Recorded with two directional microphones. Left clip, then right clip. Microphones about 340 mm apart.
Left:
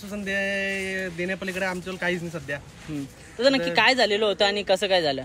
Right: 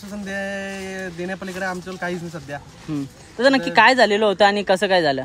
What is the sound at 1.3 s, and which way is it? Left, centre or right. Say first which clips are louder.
Speech: right 1 dB; centre.